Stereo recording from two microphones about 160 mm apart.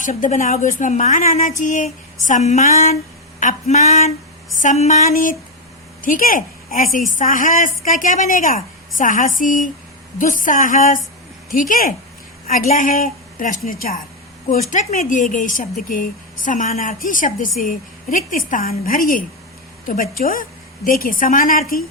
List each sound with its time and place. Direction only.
0.0 s a woman's voice: 50° left (ahead or behind)
14.7 s a woman's voice: 50° left (ahead or behind)